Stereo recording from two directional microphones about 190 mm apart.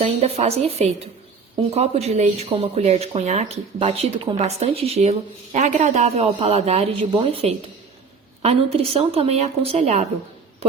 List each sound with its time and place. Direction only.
0.0 s speech: 35° right (ahead or behind)